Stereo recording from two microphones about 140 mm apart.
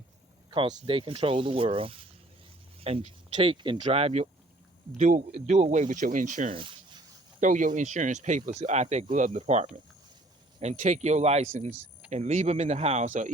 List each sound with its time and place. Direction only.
0.5 s speech: 40° right (ahead or behind)
3.3 s speech: 35° right (ahead or behind)
3.8 s speech: 50° right (ahead or behind)
4.9 s speech: 60° right (ahead or behind)
6.5 s a sound: 35° right (ahead or behind)
7.3 s speech: 65° right (ahead or behind)
12.1 s speech: 50° right (ahead or behind)
13.1 s speech: 60° right (ahead or behind)